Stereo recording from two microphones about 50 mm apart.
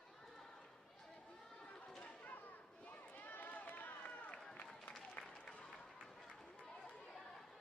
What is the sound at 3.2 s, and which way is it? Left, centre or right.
Run, left.